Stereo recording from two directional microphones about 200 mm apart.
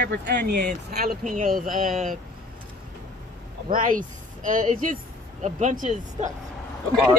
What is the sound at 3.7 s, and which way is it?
Speech, 40° right (ahead or behind).